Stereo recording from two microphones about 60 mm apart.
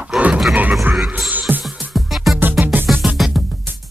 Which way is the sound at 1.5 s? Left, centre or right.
Right.